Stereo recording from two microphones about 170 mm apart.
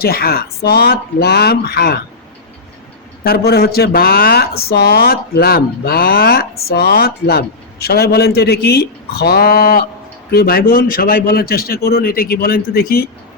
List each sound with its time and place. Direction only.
0.0 s speech: 65° left (ahead or behind)
3.2 s speech: 65° left (ahead or behind)